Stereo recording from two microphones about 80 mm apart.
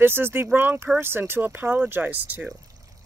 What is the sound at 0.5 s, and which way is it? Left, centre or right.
Speech, right.